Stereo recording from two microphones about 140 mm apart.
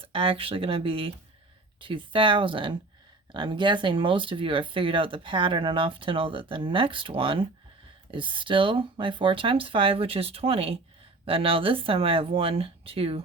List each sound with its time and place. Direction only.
0.0 s speech: 40° right (ahead or behind)